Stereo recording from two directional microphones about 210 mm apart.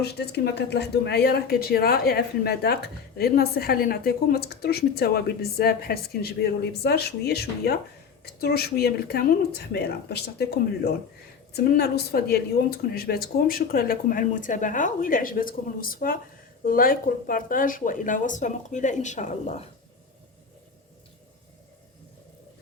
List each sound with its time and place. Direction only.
0.0 s speech: 50° left (ahead or behind); by 19.6 s 35° left (ahead or behind)